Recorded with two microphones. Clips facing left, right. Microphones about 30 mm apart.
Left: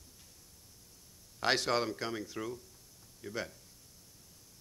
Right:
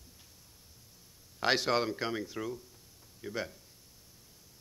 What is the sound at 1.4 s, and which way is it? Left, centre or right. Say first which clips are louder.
A man's voice: right 2 dB; centre.